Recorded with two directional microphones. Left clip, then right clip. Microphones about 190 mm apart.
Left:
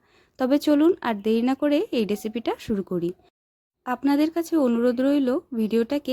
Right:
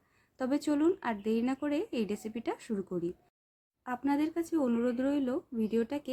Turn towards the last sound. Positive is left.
turn(degrees=55)  # may be behind; listen again after turning